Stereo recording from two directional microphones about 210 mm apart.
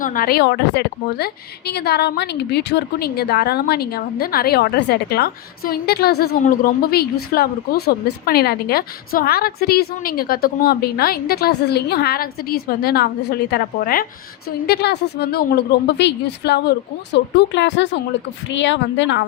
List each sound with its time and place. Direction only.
0.0 s a woman's voice: 40° left (ahead or behind); by 19.2 s 60° left (ahead or behind)